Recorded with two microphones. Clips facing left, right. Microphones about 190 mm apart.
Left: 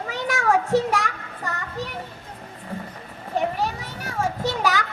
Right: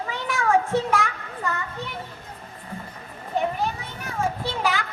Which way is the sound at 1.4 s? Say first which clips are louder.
Even; 35° left (ahead or behind).